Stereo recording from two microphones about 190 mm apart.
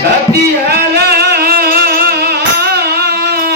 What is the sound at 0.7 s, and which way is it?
Music, 55° right (ahead or behind).